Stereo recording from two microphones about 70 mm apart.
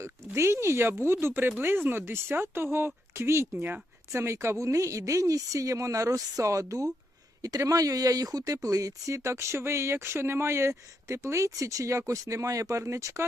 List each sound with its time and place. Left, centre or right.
0.0 s speech: right
4.1 s speech: right